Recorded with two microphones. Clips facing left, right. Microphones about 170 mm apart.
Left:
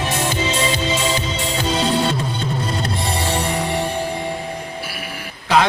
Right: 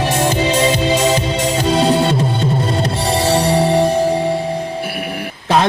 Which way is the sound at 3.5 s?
35° right (ahead or behind).